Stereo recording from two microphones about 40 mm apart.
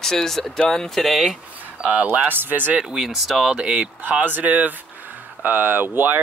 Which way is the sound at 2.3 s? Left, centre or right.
Right.